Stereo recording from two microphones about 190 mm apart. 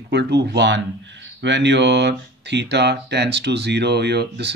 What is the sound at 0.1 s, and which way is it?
Speech, 60° right (ahead or behind).